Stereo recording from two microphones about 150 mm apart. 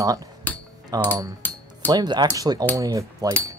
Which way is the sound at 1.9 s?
30° right (ahead or behind).